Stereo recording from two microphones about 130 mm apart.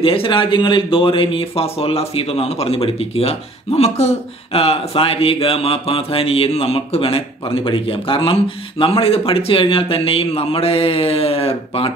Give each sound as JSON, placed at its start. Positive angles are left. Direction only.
{"t": 0.0, "sound": "speech", "side_deg": 45}